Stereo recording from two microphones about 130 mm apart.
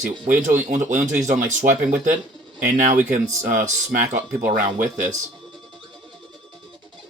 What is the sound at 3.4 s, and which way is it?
Speech, 90° right.